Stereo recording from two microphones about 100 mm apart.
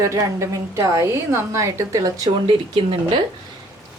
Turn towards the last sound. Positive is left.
turn(degrees=-55)  # may be behind; listen again after turning